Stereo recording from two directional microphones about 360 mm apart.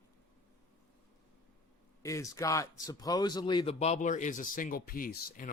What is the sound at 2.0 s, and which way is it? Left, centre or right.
A man's voice, centre.